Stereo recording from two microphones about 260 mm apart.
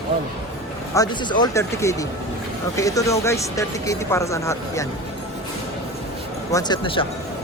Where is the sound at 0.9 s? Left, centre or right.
Centre.